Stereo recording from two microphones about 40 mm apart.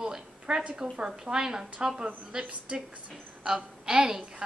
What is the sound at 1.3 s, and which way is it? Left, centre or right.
A woman's voice, centre.